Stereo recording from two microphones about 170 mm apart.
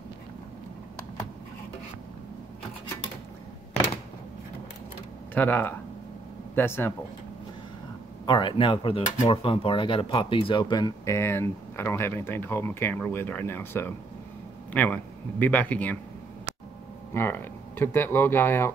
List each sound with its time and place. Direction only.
5.3 s speech: 10° left (ahead or behind)
8.3 s a man's voice: 25° left (ahead or behind); by 16.0 s 10° left (ahead or behind)
17.1 s speech: 15° left (ahead or behind)